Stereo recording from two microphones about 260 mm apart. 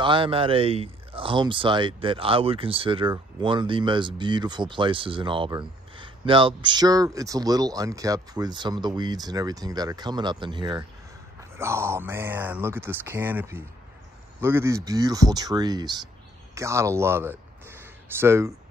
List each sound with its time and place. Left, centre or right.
0.0 s speech: centre